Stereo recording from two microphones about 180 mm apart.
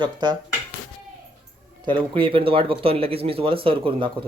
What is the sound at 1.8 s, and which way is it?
Speech, 25° right (ahead or behind).